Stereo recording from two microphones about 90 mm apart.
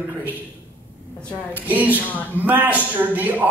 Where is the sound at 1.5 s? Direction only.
20° right (ahead or behind).